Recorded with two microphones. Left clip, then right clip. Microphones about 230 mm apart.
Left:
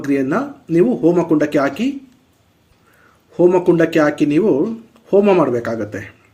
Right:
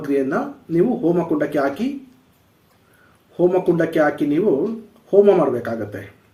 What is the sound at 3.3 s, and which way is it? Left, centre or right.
Speech, left.